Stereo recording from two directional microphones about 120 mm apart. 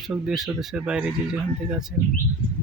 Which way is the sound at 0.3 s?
Centre (ahead or behind).